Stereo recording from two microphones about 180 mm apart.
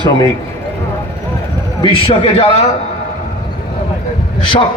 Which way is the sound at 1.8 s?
30° left (ahead or behind).